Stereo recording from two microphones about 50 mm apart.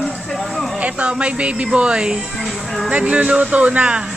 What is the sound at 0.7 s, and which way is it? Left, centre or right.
Speech, right.